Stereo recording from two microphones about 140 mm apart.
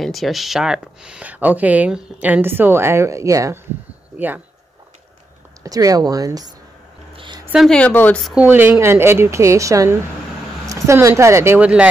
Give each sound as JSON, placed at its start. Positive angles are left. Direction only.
{"t": 0.0, "sound": "speech", "side_deg": 0}
{"t": 5.6, "sound": "speech", "side_deg": -25}
{"t": 7.2, "sound": "a sound", "side_deg": -35}
{"t": 7.5, "sound": "speech", "side_deg": 5}
{"t": 8.4, "sound": "speech", "side_deg": -15}